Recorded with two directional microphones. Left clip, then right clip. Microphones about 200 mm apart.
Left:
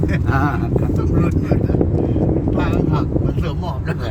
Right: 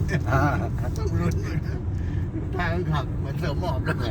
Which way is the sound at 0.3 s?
10° right (ahead or behind).